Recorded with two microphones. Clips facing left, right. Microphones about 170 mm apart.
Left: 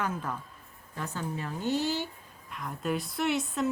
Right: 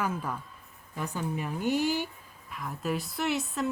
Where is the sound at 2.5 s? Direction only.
Centre (ahead or behind).